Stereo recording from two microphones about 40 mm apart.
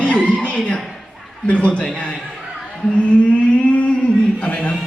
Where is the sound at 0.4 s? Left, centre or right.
Left.